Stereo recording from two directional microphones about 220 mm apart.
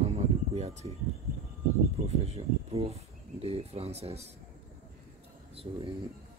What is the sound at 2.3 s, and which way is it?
Speech, 25° right (ahead or behind).